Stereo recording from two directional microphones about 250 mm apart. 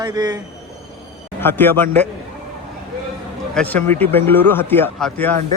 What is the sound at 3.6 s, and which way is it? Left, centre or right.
Speech, centre.